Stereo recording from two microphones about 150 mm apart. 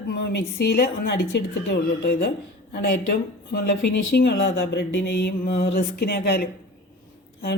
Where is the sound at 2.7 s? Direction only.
90° left.